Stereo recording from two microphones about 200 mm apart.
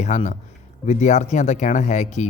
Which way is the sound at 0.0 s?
35° left (ahead or behind).